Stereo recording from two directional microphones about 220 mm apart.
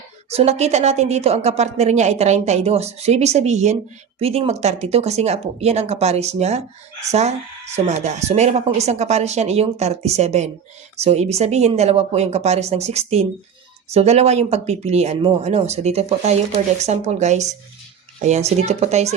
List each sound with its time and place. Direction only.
0.3 s speech: 30° right (ahead or behind)